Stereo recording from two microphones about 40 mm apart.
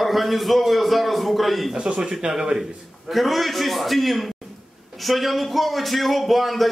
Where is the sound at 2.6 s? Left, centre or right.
Centre.